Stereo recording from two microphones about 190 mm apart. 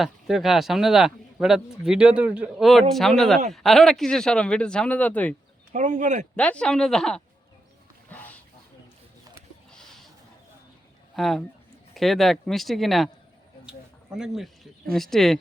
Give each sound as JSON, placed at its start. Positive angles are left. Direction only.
{"t": 0.0, "sound": "speech", "side_deg": 0}
{"t": 5.7, "sound": "speech", "side_deg": -40}
{"t": 6.3, "sound": "speech", "side_deg": 5}
{"t": 11.1, "sound": "speech", "side_deg": 0}
{"t": 13.7, "sound": "a sound", "side_deg": -5}
{"t": 14.9, "sound": "speech", "side_deg": 0}